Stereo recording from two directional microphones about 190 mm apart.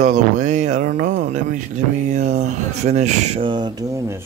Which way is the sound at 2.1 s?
40° right (ahead or behind).